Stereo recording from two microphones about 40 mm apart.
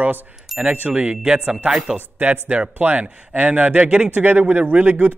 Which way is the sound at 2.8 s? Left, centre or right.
Right.